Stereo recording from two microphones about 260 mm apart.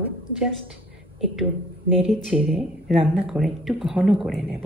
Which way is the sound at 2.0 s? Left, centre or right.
Centre.